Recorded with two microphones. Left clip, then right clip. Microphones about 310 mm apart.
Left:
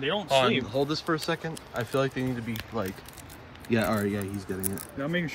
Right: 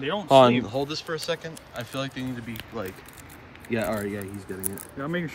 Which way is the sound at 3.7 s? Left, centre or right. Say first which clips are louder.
Left 1 dB; centre.